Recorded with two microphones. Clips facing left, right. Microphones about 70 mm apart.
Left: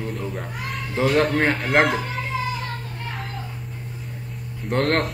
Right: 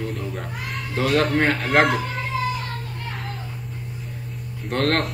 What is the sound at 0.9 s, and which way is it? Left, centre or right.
Speech, left.